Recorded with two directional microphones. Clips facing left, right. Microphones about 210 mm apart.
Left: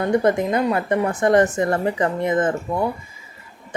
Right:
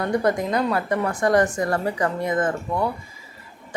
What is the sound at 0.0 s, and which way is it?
Speech, 25° left (ahead or behind).